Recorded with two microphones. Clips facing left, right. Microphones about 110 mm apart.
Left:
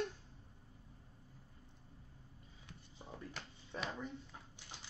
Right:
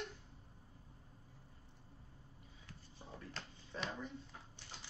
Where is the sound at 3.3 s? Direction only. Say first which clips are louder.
Even; 5° left (ahead or behind).